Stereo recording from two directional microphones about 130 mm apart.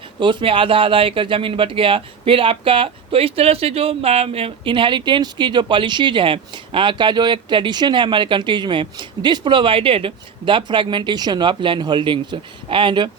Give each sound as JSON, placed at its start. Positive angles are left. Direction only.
{"t": 0.2, "sound": "speech", "side_deg": -40}